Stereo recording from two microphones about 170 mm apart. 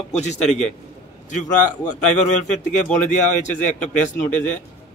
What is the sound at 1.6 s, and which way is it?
Speech, 45° left (ahead or behind).